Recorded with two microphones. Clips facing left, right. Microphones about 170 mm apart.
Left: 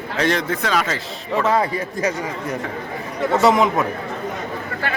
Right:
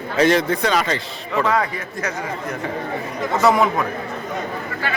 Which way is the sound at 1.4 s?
30° left (ahead or behind).